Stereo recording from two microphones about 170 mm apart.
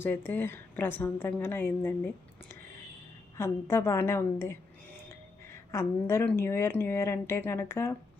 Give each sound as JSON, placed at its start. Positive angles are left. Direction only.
{"t": 0.0, "sound": "a woman's voice", "side_deg": 10}
{"t": 3.3, "sound": "a woman's voice", "side_deg": 15}